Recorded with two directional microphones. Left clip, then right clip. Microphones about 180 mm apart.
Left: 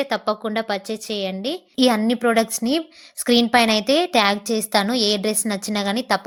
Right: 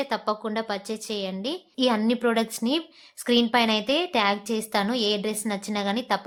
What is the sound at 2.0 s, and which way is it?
A woman's voice, 15° left (ahead or behind).